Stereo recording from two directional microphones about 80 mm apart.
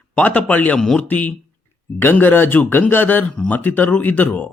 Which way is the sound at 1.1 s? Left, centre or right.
Centre.